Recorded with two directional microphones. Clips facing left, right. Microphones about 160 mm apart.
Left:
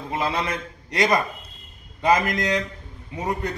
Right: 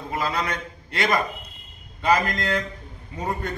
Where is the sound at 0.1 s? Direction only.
25° left (ahead or behind).